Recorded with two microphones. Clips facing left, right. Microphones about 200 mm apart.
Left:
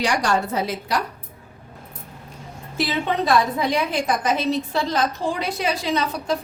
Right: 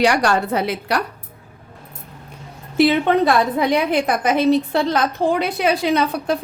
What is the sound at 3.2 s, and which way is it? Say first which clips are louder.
A woman's voice: right 3 dB; 60° right (ahead or behind).